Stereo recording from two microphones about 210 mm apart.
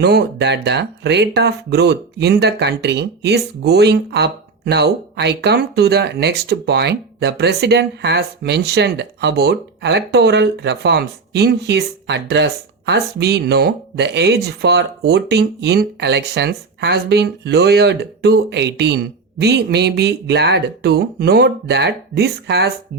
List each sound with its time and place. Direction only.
0.0 s speech: 50° right (ahead or behind)